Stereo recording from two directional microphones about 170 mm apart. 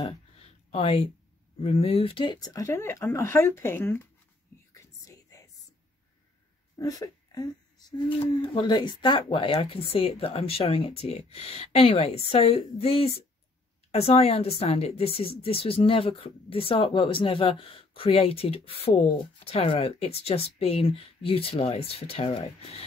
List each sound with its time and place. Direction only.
0.0 s a sound: 35° left (ahead or behind)
1.6 s speech: 35° left (ahead or behind); by 4.1 s 15° left (ahead or behind)
4.5 s whispering: 15° left (ahead or behind)
6.8 s speech: 20° left (ahead or behind)